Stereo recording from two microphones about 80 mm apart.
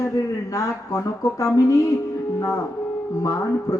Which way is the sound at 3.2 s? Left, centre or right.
Left.